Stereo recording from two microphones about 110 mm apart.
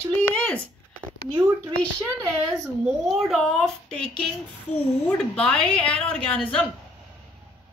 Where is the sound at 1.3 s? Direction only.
25° right (ahead or behind).